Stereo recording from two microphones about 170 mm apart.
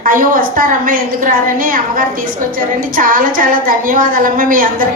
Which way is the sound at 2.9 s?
55° right (ahead or behind).